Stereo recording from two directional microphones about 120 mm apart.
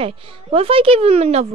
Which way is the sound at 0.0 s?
50° right (ahead or behind).